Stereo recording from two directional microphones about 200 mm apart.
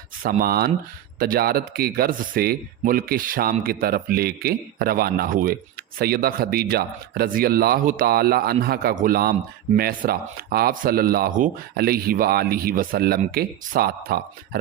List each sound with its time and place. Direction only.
0.2 s speech: 45° right (ahead or behind)